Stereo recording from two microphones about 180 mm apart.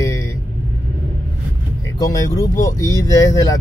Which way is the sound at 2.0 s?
15° left (ahead or behind).